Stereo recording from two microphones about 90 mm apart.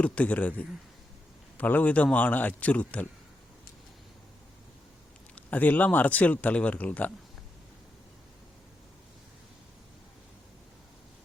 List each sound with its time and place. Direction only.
0.0 s speech: 15° left (ahead or behind)
5.3 s speech: 20° left (ahead or behind)